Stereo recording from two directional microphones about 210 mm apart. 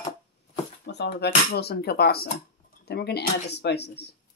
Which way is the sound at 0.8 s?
55° left (ahead or behind).